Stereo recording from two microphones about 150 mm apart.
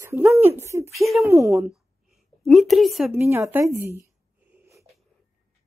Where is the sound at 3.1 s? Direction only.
20° right (ahead or behind).